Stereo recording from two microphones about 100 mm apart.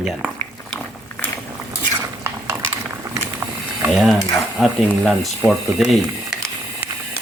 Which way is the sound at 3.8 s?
Centre (ahead or behind).